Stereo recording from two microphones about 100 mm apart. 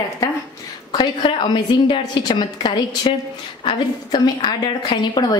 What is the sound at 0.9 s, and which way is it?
A woman's voice, 55° left (ahead or behind).